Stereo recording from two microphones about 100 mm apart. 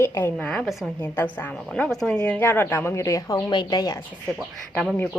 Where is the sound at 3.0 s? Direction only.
35° left (ahead or behind).